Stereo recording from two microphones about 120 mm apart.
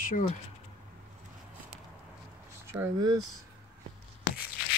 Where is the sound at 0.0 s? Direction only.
90° left.